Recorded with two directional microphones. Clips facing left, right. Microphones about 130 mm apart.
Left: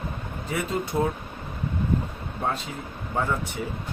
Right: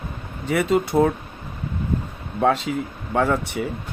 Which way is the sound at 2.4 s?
90° right.